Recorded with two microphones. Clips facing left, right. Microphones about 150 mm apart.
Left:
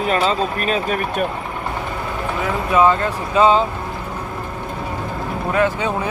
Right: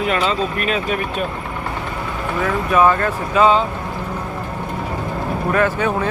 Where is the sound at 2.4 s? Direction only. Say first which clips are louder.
Even; 20° left (ahead or behind).